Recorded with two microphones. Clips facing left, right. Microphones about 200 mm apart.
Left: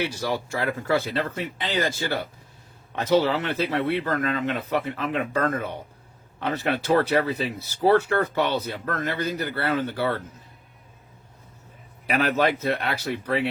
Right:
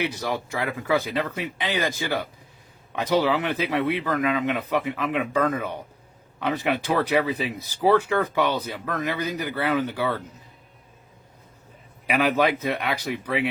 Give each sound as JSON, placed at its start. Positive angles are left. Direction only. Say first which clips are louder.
{"t": 0.0, "sound": "speech", "louder": "even", "side_deg": -15}
{"t": 12.0, "sound": "speech", "louder": "right 1 dB", "side_deg": -10}